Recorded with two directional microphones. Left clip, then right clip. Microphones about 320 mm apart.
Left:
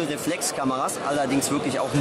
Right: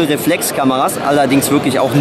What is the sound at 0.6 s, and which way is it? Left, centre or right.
Speech, centre.